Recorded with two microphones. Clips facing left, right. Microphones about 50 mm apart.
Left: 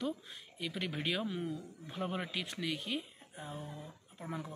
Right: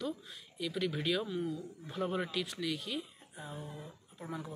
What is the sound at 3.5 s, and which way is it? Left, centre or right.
Speech, centre.